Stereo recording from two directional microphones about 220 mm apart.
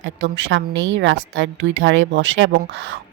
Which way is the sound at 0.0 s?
60° right (ahead or behind).